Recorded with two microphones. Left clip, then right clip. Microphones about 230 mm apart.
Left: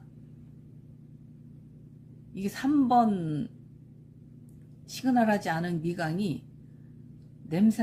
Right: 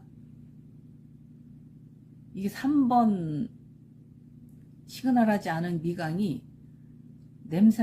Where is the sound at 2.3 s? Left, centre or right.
Centre.